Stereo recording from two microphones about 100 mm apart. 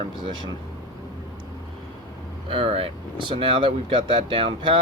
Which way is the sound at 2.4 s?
65° right (ahead or behind).